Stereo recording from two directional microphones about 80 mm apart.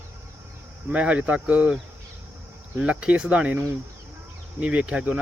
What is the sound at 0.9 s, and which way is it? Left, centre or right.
Speech, centre.